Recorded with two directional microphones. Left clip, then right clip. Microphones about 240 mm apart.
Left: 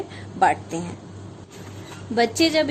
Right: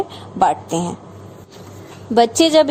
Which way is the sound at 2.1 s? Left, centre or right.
Right.